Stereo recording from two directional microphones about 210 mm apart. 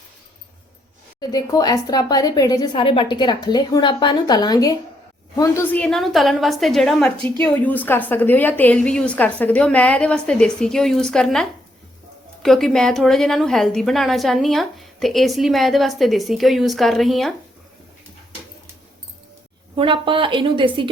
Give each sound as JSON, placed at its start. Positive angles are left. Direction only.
{"t": 1.2, "sound": "a woman's voice", "side_deg": 20}
{"t": 19.7, "sound": "a woman's voice", "side_deg": -25}